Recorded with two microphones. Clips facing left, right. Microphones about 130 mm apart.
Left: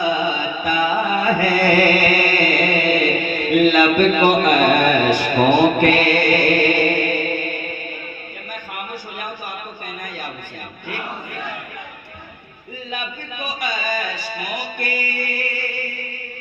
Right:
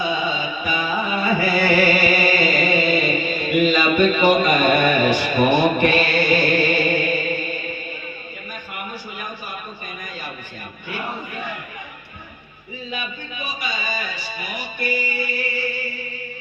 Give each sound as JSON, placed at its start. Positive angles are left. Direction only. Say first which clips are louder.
{"t": 0.0, "sound": "music", "louder": "left 3 dB", "side_deg": 50}
{"t": 12.9, "sound": "music", "louder": "left 2 dB", "side_deg": 50}